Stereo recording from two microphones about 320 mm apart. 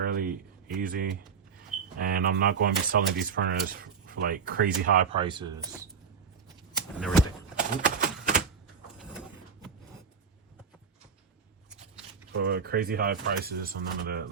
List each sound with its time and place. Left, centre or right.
0.0 s speech: right; by 5.8 s centre
7.6 s typewriter: right
9.0 s a sound: centre
12.3 s speech: right